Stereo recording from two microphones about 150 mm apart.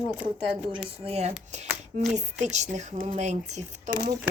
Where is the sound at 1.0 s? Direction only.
45° right (ahead or behind).